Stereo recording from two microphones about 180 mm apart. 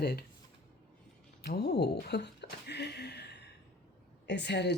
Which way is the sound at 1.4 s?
60° left (ahead or behind).